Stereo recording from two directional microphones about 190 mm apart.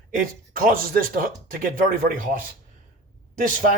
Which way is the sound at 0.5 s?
50° right (ahead or behind).